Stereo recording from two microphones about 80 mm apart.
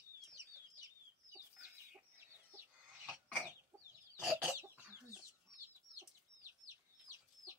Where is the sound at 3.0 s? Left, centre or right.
Centre.